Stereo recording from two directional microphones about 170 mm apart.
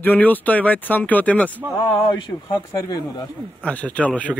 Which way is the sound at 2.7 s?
20° left (ahead or behind).